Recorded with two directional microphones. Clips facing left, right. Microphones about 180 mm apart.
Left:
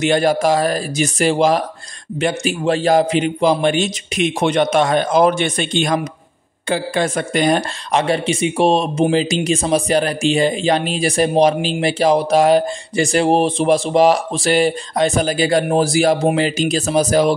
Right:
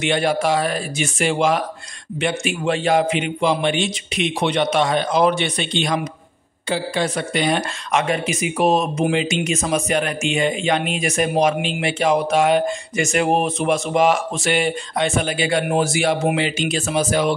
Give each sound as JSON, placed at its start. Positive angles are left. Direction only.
{"t": 0.0, "sound": "a man's voice", "side_deg": 40}